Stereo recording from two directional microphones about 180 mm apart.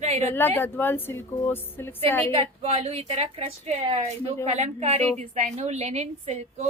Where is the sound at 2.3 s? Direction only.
35° right (ahead or behind).